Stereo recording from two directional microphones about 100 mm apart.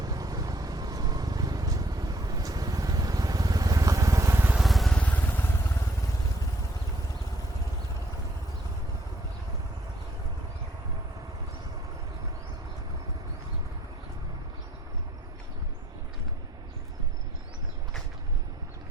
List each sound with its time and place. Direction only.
0.0 s vehicle: 40° right (ahead or behind); by 4.5 s 25° right (ahead or behind)
4.5 s vehicle: centre (ahead or behind)
4.9 s vehicle: 15° left (ahead or behind)